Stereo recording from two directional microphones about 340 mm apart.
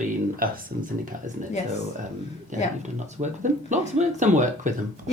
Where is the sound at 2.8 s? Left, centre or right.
Right.